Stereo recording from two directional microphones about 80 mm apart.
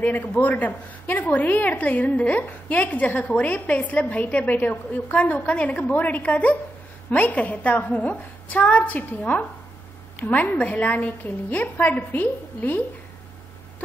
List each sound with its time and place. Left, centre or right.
0.0 s a woman's voice: left